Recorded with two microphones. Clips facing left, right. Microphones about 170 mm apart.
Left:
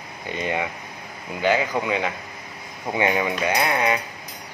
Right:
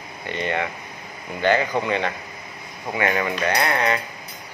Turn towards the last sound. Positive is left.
turn(degrees=10)  # may be behind; listen again after turning